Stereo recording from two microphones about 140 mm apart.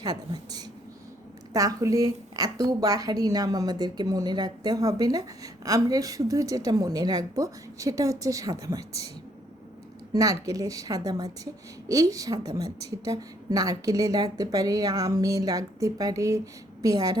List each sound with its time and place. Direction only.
0.0 s a sound: 30° right (ahead or behind)
1.5 s a woman's voice: 25° right (ahead or behind)
10.1 s a woman's voice: 25° right (ahead or behind)